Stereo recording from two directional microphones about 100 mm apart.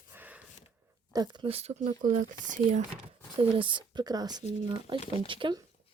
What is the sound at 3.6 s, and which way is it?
Speech, 55° right (ahead or behind).